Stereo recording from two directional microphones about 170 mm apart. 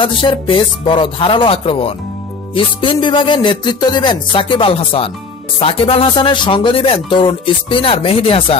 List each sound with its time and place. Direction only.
0.0 s speech: 30° left (ahead or behind)